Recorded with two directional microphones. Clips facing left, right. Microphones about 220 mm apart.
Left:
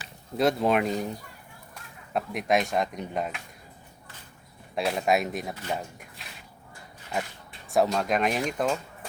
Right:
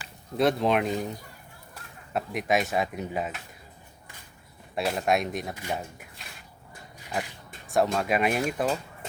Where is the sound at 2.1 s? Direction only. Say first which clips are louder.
Left 1 dB; centre (ahead or behind).